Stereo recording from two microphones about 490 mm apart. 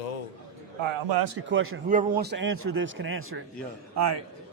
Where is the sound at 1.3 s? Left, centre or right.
Right.